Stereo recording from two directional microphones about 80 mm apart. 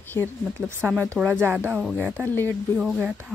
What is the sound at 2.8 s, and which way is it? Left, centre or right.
Speech, centre.